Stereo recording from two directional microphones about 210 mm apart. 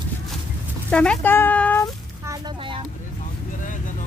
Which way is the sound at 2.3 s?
25° right (ahead or behind).